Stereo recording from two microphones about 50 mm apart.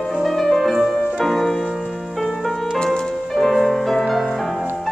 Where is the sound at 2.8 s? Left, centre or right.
Centre.